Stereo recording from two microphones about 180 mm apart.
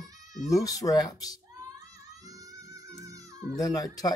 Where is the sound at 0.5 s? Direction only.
20° left (ahead or behind).